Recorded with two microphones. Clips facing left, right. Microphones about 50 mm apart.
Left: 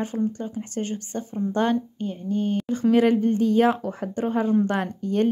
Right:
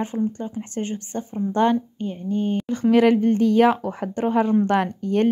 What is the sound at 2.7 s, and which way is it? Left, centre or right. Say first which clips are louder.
Speech: right 3 dB; right.